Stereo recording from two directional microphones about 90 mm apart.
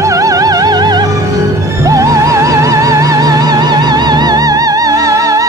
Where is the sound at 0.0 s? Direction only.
40° right (ahead or behind).